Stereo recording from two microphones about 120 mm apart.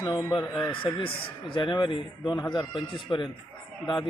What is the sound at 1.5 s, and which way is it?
Speech, 45° left (ahead or behind).